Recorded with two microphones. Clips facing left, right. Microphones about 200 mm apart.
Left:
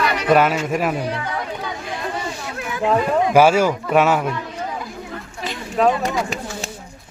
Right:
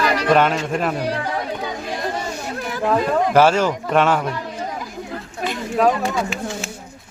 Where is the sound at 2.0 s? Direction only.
40° right (ahead or behind).